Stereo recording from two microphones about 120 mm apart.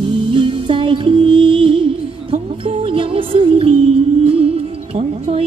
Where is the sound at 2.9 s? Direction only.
50° right (ahead or behind).